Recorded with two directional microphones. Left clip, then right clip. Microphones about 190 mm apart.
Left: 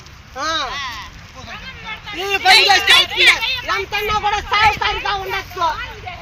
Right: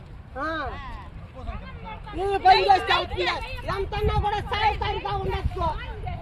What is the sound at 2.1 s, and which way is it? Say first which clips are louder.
Speech: left 6 dB; 35° right (ahead or behind).